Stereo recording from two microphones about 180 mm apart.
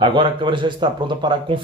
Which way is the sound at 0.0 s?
25° right (ahead or behind).